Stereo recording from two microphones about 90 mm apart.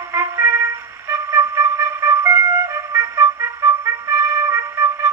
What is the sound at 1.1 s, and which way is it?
Flute, 25° right (ahead or behind).